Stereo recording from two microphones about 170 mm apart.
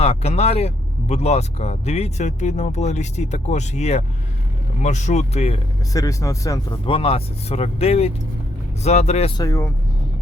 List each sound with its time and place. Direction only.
0.0 s speech: 40° left (ahead or behind)
5.9 s speech: 20° left (ahead or behind)
6.8 s speech: 35° left (ahead or behind)
9.4 s speech: 15° left (ahead or behind)